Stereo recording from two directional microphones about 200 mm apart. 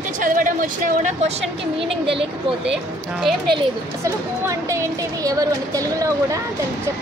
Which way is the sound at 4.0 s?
15° right (ahead or behind).